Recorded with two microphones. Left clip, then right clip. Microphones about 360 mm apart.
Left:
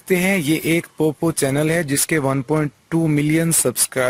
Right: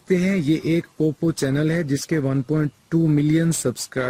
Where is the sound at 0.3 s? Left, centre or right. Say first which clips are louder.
Left 3 dB; left.